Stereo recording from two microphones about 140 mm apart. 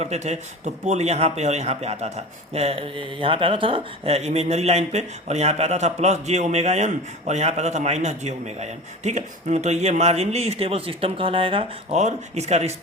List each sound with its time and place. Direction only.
0.0 s a man's voice: 55° right (ahead or behind)
11.9 s a man's voice: 50° right (ahead or behind)